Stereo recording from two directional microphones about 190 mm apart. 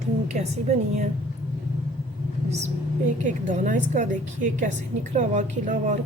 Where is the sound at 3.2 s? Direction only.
40° right (ahead or behind).